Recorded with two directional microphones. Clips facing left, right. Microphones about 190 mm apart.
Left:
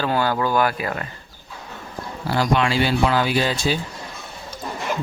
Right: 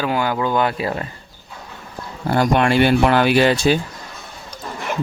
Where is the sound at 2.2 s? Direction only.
55° right (ahead or behind).